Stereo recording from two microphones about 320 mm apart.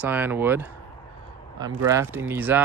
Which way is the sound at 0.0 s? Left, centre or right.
Centre.